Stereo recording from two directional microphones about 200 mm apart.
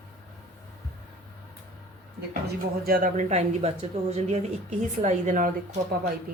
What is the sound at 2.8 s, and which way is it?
Speech, 45° right (ahead or behind).